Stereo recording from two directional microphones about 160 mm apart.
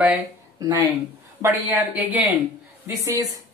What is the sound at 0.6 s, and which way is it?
Speech, 20° right (ahead or behind).